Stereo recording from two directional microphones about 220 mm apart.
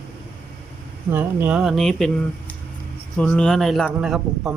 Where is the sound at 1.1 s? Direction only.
10° right (ahead or behind).